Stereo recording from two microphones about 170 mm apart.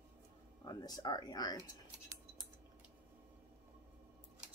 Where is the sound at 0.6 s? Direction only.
20° left (ahead or behind).